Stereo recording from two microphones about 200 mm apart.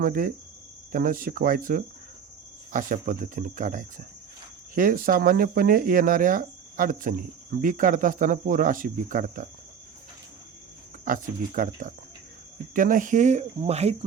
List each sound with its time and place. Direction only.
0.0 s speech: 45° right (ahead or behind)
11.0 s speech: 45° right (ahead or behind)